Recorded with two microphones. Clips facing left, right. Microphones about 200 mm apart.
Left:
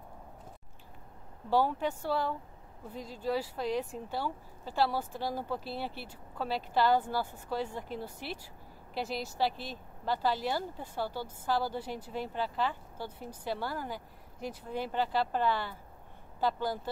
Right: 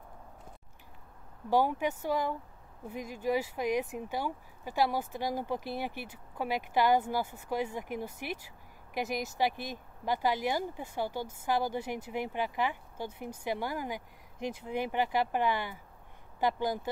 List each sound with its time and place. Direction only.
1.5 s speech: 15° right (ahead or behind)